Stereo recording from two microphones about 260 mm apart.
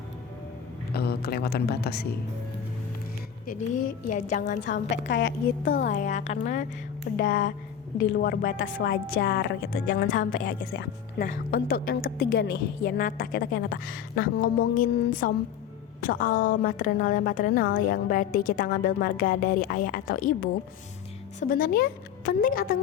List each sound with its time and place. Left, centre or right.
0.9 s speech: left
3.4 s a woman's voice: left
4.7 s a woman's voice: left
5.6 s a woman's voice: left
9.8 s a woman's voice: left